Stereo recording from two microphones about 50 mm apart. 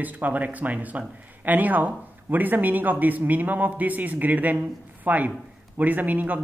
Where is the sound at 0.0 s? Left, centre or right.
Right.